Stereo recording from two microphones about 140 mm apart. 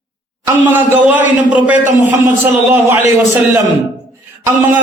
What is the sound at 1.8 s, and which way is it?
Speech, 65° right (ahead or behind).